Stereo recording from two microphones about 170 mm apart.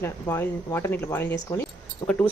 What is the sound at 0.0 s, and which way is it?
Speech, 15° left (ahead or behind).